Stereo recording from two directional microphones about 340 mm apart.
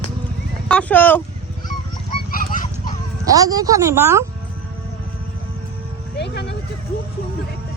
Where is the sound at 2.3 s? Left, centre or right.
Left.